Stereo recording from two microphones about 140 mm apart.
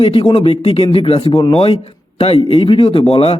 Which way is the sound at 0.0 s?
40° left (ahead or behind).